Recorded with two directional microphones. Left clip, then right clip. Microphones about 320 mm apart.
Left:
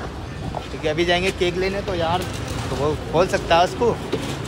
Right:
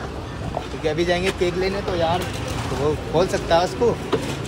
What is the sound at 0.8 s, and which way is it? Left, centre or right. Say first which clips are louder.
Speech: left 1 dB; centre.